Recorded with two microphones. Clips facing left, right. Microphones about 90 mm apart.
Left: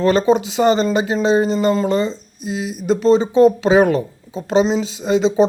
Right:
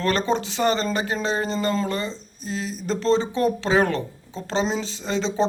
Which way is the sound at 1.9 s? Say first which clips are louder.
Left 9 dB; 20° left (ahead or behind).